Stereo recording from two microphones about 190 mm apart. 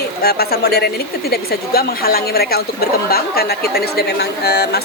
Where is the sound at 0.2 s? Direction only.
55° left (ahead or behind).